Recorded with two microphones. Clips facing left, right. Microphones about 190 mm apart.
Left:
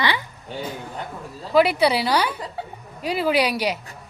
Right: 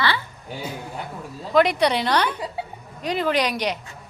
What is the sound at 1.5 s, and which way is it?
A woman's voice, 5° left (ahead or behind).